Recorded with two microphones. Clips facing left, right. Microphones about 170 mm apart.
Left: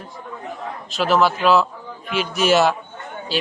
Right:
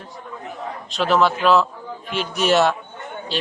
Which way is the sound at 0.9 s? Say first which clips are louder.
Even; 5° left (ahead or behind).